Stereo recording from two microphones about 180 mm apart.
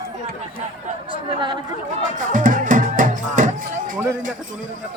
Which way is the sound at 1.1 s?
25° right (ahead or behind).